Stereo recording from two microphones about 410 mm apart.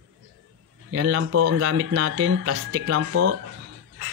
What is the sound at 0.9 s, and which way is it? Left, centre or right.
Speech, right.